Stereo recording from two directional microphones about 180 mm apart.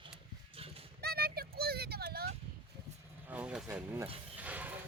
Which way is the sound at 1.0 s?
60° right (ahead or behind).